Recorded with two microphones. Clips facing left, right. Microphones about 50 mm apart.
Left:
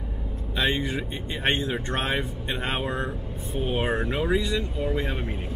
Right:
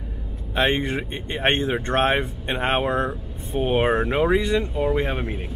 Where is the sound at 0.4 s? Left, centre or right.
Right.